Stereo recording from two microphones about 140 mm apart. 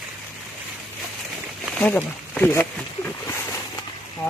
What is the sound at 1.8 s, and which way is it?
Speech, 10° left (ahead or behind).